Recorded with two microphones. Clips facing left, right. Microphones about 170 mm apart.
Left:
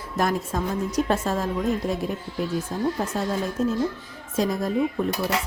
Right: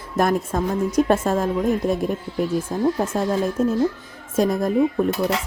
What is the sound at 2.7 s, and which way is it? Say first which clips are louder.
A woman's voice: right 5 dB; 45° right (ahead or behind).